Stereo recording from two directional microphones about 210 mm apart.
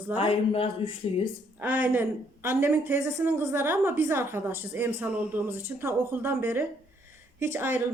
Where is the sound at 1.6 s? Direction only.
10° right (ahead or behind).